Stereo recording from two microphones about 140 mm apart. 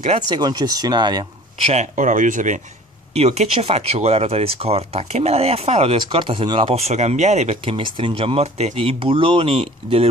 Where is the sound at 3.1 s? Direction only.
50° right (ahead or behind).